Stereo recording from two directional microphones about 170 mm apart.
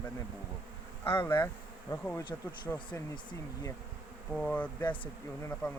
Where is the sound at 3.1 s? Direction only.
25° left (ahead or behind).